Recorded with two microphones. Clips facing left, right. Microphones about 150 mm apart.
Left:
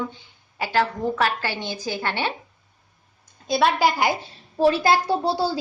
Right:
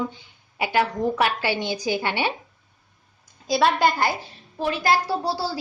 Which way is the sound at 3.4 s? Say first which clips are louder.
Even; centre (ahead or behind).